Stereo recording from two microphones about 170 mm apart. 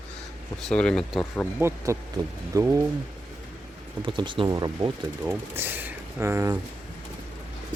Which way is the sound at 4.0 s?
30° right (ahead or behind).